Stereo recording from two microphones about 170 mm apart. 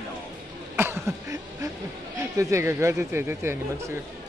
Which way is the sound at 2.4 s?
15° right (ahead or behind).